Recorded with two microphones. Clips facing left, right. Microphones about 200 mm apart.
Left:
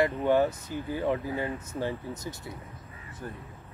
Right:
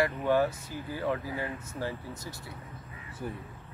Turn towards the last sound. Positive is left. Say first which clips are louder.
# right 2 dB
turn(degrees=-10)  # may be behind; listen again after turning